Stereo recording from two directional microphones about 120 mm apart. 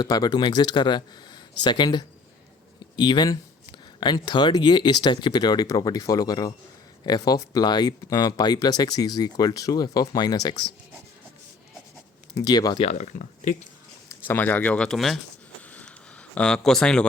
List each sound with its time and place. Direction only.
0.0 s speech: 35° left (ahead or behind)
12.3 s speech: 35° left (ahead or behind)
12.8 s speech: 70° left (ahead or behind); by 13.7 s 90° left
14.3 s speech: 15° left (ahead or behind)
15.7 s a sound: 10° left (ahead or behind)